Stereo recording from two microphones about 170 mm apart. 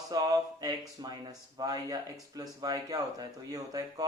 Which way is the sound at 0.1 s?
20° right (ahead or behind).